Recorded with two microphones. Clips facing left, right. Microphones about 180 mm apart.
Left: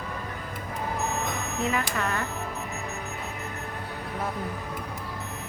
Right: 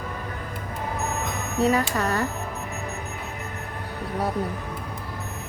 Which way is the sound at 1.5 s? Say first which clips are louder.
Right 8 dB; 40° right (ahead or behind).